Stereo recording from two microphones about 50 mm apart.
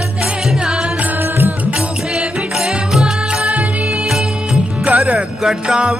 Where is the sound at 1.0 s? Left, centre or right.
Right.